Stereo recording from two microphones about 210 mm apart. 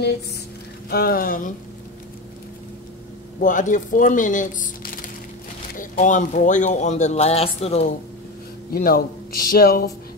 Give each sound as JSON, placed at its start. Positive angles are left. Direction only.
{"t": 0.8, "sound": "speech", "side_deg": 45}
{"t": 3.3, "sound": "speech", "side_deg": 40}
{"t": 8.7, "sound": "speech", "side_deg": 45}